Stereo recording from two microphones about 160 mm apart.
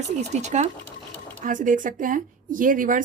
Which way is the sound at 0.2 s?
45° right (ahead or behind).